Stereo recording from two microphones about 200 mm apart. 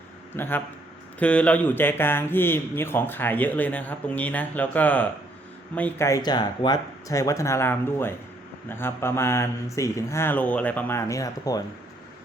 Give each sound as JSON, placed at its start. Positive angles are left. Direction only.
{"t": 0.3, "sound": "speech", "side_deg": 10}